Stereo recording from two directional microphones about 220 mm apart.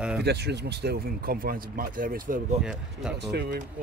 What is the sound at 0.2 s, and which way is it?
Speech, 50° right (ahead or behind).